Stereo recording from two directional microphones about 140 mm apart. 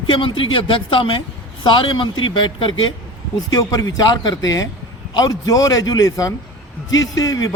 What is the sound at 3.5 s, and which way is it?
A man's voice, 25° left (ahead or behind).